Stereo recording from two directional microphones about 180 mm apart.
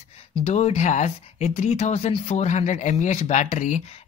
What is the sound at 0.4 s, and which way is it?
Speech, 35° left (ahead or behind).